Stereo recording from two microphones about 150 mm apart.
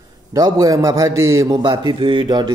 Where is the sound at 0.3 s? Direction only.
25° right (ahead or behind).